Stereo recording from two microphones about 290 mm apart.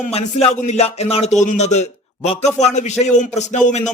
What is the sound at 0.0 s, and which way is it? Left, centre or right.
A man's voice, left.